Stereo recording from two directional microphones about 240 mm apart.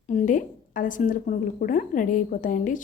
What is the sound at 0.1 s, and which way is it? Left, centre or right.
A woman's voice, left.